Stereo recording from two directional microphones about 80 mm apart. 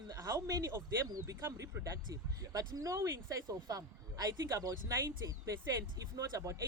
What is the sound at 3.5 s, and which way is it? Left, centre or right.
Speech, right.